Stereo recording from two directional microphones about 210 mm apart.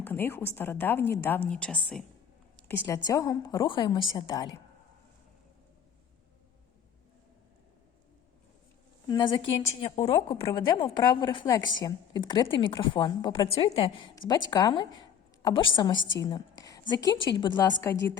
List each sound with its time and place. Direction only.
0.0 s a woman's voice: 10° left (ahead or behind)
9.0 s a woman's voice: 20° left (ahead or behind)
9.9 s a woman's voice: 30° left (ahead or behind)
10.4 s a woman's voice: 20° left (ahead or behind)
16.0 s a woman's voice: 60° left (ahead or behind)
16.2 s whispering: 20° left (ahead or behind)
16.9 s a woman's voice: 20° left (ahead or behind)